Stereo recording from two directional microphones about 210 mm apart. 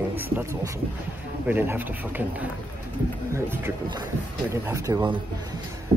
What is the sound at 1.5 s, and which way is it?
Speech, 10° right (ahead or behind).